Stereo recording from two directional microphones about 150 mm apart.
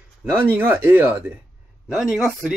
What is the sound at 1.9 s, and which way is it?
Speech, centre (ahead or behind).